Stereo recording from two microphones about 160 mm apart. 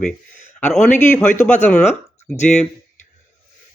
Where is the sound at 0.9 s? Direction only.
50° left (ahead or behind).